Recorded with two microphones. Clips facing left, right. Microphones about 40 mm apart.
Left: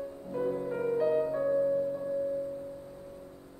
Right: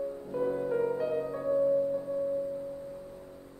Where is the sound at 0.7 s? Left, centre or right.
Centre.